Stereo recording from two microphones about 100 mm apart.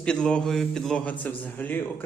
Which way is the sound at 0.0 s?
10° left (ahead or behind).